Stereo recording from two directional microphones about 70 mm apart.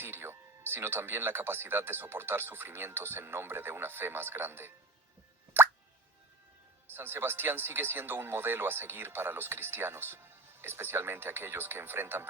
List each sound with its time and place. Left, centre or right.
0.0 s speech: right
6.9 s speech: right